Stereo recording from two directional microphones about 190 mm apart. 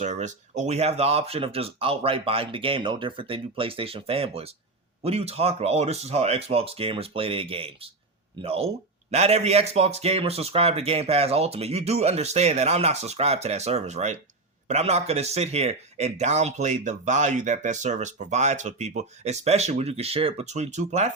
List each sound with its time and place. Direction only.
0.0 s speech: 40° right (ahead or behind)